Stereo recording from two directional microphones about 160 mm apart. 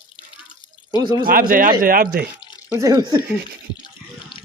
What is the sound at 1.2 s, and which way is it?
Speech, 65° right (ahead or behind).